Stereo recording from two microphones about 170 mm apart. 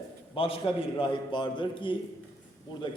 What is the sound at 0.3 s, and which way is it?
A man's voice, 35° left (ahead or behind).